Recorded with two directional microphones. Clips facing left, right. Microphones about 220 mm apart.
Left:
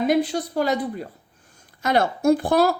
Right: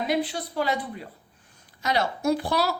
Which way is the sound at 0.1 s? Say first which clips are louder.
Left 6 dB; 45° left (ahead or behind).